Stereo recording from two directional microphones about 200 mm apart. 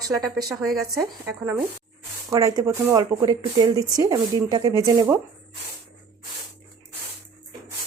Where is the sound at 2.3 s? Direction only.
15° right (ahead or behind).